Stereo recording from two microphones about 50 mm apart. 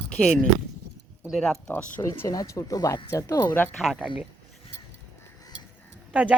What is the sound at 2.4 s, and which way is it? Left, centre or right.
Speech, left.